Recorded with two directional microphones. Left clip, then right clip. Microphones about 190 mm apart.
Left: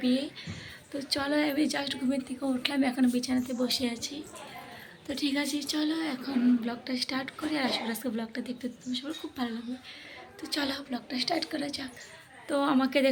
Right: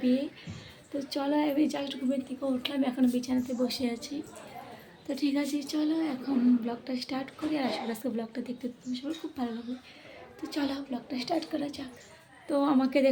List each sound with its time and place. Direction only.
0.0 s a woman's voice: 10° right (ahead or behind)